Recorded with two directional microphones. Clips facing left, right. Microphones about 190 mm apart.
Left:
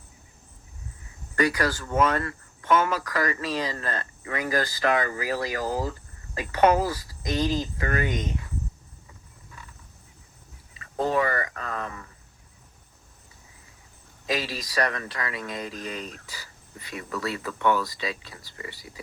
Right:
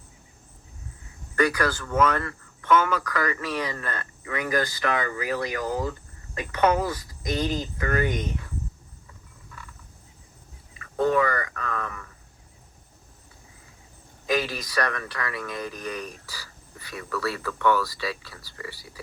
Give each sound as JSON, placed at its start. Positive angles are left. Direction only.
{"t": 1.4, "sound": "speech", "side_deg": 25}
{"t": 10.8, "sound": "a sound", "side_deg": 30}
{"t": 14.3, "sound": "speech", "side_deg": 25}